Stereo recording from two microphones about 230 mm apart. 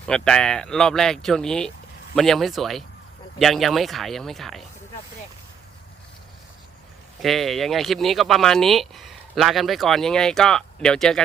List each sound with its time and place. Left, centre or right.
0.0 s speech: centre
7.2 s speech: centre